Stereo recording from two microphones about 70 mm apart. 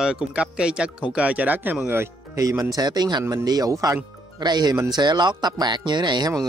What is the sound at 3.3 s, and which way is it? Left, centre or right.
Speech, right.